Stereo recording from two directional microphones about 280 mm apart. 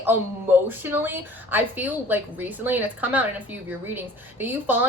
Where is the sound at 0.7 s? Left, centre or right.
Centre.